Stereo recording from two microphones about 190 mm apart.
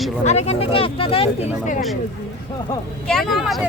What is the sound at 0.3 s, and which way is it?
Speech, 35° left (ahead or behind).